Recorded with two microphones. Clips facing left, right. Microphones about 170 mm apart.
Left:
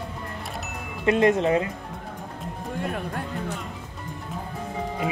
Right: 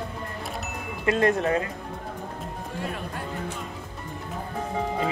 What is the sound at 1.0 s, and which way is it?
Speech, 20° left (ahead or behind).